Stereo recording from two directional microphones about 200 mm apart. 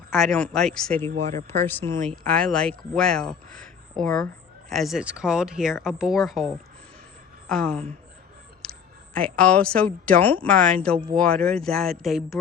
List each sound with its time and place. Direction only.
0.1 s a woman's voice: centre (ahead or behind)
1.1 s speech: 35° right (ahead or behind)
1.6 s a woman's voice: 10° left (ahead or behind)
8.6 s a sound: 5° left (ahead or behind)
9.1 s a woman's voice: 5° left (ahead or behind)